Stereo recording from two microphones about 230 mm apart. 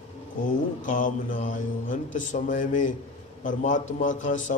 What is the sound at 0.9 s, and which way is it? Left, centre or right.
A man's voice, left.